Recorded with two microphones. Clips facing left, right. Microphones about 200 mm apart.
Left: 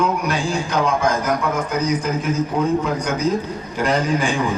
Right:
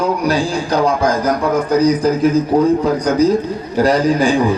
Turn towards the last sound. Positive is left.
turn(degrees=-35)  # may be behind; listen again after turning